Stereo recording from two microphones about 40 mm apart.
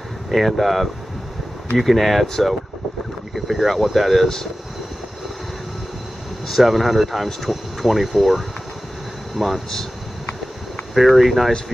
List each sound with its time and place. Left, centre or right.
0.3 s speech: centre
6.4 s speech: centre
11.1 s speech: centre